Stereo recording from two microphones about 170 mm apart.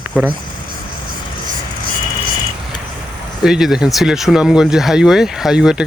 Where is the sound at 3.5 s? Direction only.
Centre (ahead or behind).